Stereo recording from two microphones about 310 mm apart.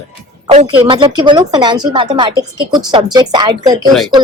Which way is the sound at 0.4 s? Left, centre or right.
Centre.